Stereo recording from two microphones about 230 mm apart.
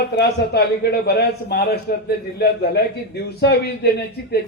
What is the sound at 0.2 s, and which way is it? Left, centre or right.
A man's voice, left.